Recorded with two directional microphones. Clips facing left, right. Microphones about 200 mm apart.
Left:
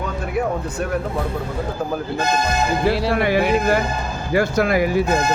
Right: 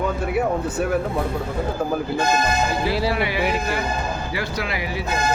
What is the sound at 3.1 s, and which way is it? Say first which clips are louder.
Speech: left 5 dB; 50° left (ahead or behind).